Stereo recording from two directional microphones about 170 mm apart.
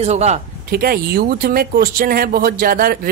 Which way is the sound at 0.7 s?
60° right (ahead or behind).